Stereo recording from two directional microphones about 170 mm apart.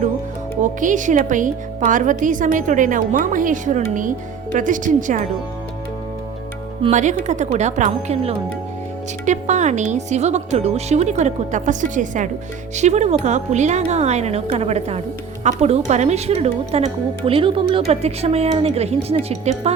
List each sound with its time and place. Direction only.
0.6 s a woman's voice: 50° right (ahead or behind)
6.9 s a woman's voice: 45° right (ahead or behind)